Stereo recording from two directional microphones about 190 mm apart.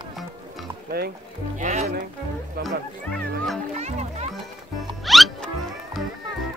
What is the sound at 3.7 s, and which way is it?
Music, 35° right (ahead or behind).